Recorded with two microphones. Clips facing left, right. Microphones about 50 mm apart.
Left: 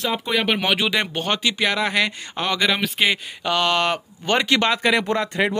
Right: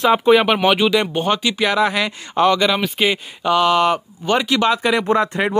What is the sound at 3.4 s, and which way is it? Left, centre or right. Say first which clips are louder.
Speech: right 6 dB; centre.